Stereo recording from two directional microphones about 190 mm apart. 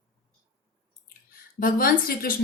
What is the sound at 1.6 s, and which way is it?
Speech, 50° left (ahead or behind).